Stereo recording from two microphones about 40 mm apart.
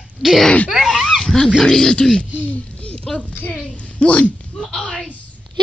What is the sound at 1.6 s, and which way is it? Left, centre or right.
Speech, centre.